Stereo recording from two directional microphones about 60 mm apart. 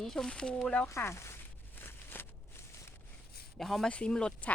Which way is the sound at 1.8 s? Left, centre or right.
Left.